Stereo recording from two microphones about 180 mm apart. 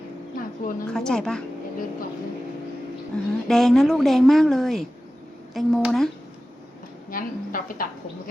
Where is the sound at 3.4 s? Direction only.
Centre (ahead or behind).